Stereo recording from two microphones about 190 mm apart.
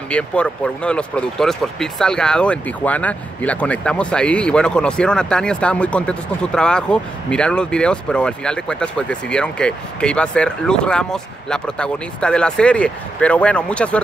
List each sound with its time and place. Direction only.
0.1 s speech: 5° left (ahead or behind)